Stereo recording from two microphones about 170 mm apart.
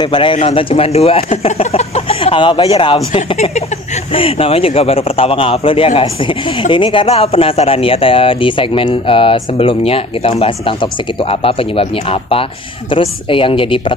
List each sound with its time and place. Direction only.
0.0 s a man's voice: 30° left (ahead or behind)